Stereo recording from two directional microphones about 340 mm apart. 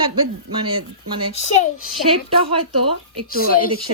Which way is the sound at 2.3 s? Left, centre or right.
Centre.